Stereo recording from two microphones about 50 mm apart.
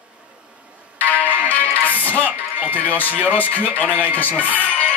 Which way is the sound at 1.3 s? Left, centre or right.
Left.